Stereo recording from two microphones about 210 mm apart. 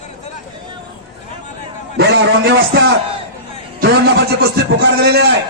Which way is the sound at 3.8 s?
50° right (ahead or behind).